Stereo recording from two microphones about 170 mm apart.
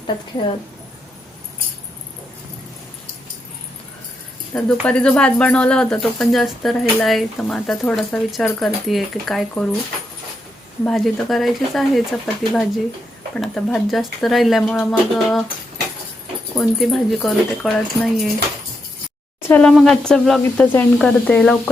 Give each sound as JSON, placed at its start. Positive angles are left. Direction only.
{"t": 4.5, "sound": "speech", "side_deg": 5}
{"t": 10.8, "sound": "speech", "side_deg": 0}
{"t": 16.6, "sound": "speech", "side_deg": 0}
{"t": 19.4, "sound": "speech", "side_deg": 10}